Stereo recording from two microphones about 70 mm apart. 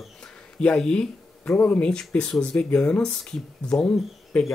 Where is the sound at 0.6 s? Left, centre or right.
Centre.